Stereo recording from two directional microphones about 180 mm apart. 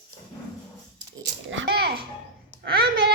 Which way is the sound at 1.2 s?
80° right.